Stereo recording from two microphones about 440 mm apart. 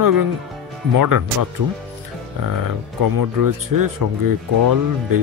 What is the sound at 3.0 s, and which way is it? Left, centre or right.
Speech, right.